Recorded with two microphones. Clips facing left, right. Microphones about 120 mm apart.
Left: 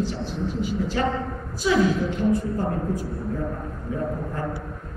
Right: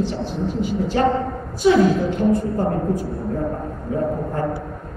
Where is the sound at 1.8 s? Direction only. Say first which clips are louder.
Right 4 dB; 45° right (ahead or behind).